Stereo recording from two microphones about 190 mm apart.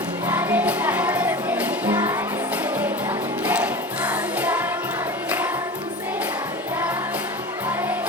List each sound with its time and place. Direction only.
0.3 s music: 10° right (ahead or behind)
3.4 s music: 10° right (ahead or behind)